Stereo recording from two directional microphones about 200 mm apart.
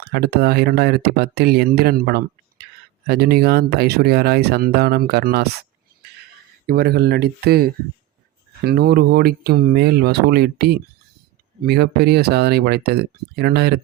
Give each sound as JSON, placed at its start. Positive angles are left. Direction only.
{"t": 0.0, "sound": "speech", "side_deg": -55}
{"t": 6.7, "sound": "speech", "side_deg": -50}